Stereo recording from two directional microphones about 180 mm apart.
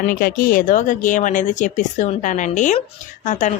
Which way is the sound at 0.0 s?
55° left (ahead or behind).